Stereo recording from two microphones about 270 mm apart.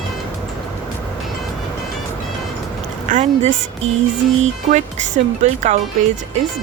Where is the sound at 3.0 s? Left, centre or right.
Right.